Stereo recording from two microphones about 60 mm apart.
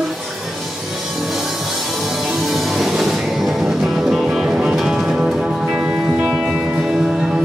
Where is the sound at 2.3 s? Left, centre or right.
Centre.